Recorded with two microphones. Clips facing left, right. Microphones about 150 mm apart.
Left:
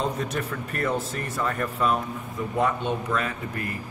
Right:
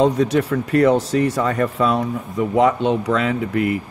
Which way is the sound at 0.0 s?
90° right.